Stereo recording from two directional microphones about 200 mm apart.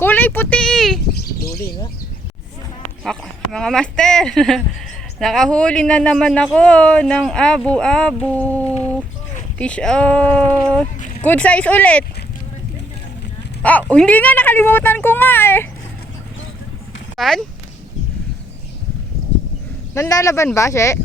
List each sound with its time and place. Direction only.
0.0 s a sound: 10° left (ahead or behind)
1.2 s bird: 50° left (ahead or behind)
3.0 s a man's voice: 5° left (ahead or behind)
13.6 s speech: 5° left (ahead or behind)
17.2 s a man's voice: centre (ahead or behind)
19.9 s speech: 15° left (ahead or behind)